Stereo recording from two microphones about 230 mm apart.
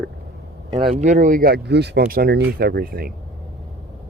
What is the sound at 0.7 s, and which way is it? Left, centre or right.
Speech, right.